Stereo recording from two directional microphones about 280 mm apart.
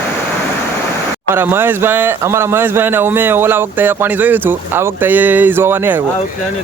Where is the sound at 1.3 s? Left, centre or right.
Centre.